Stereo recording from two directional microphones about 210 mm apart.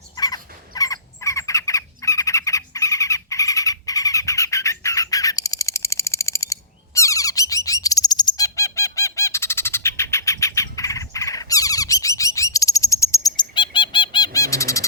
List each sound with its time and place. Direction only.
0.2 s bird: 20° left (ahead or behind)